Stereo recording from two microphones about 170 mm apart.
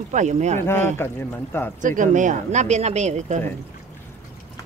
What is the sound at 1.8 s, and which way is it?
Speech, 50° right (ahead or behind).